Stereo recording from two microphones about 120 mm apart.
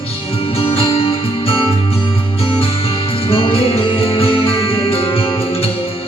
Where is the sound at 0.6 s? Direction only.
50° left (ahead or behind).